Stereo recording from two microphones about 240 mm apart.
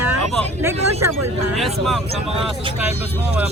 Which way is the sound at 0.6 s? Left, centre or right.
Centre.